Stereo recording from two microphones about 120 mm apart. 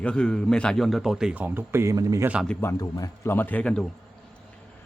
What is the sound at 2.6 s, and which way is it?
Speech, 25° left (ahead or behind).